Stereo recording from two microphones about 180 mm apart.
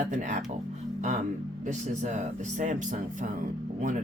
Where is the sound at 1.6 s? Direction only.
40° right (ahead or behind).